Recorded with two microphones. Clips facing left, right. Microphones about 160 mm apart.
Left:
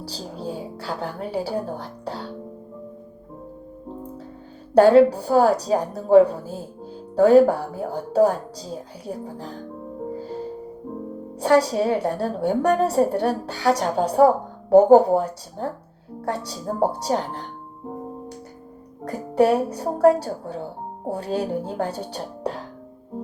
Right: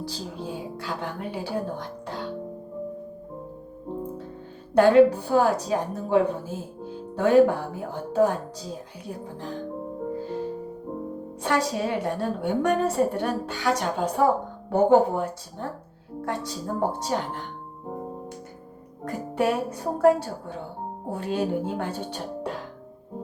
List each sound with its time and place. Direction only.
0.0 s speech: 35° left (ahead or behind)
4.7 s a woman's voice: 35° left (ahead or behind)
11.3 s a woman's voice: 35° left (ahead or behind)
19.0 s a woman's voice: 35° left (ahead or behind)